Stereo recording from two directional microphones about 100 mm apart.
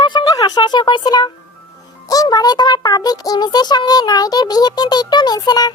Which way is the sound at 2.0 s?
40° left (ahead or behind).